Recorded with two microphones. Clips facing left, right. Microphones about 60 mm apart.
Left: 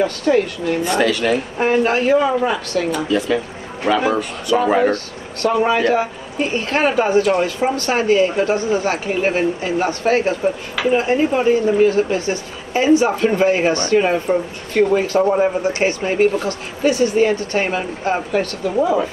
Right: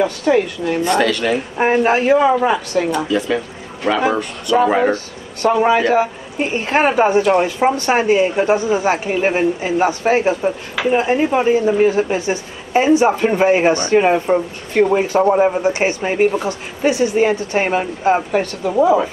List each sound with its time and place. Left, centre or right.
0.0 s speech: centre
0.8 s speech: centre
1.6 s speech: right
3.1 s speech: centre; by 18.9 s right